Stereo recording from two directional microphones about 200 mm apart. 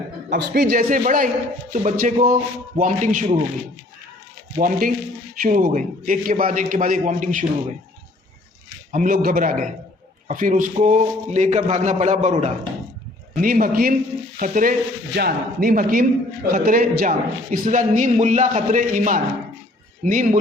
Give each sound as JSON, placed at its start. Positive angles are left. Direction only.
{"t": 0.3, "sound": "frying", "side_deg": -45}
{"t": 1.7, "sound": "a man's voice", "side_deg": -40}
{"t": 4.5, "sound": "frying", "side_deg": -45}
{"t": 5.4, "sound": "a man's voice", "side_deg": -45}
{"t": 8.9, "sound": "frying", "side_deg": -40}
{"t": 10.2, "sound": "a man's voice", "side_deg": -40}
{"t": 13.4, "sound": "frying", "side_deg": -45}
{"t": 16.5, "sound": "a man's voice", "side_deg": -45}